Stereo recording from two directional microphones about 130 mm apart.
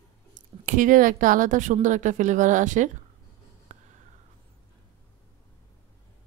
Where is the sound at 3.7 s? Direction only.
65° right (ahead or behind).